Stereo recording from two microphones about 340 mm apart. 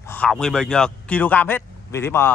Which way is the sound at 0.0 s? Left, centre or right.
Centre.